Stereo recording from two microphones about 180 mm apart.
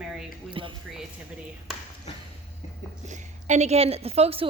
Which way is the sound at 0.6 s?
30° right (ahead or behind).